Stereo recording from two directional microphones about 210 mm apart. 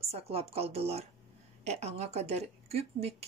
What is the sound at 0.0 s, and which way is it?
A woman's voice, 30° right (ahead or behind).